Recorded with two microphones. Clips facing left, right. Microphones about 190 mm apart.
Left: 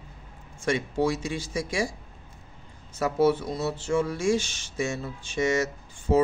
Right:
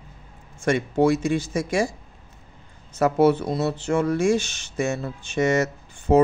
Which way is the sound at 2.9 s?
65° right (ahead or behind).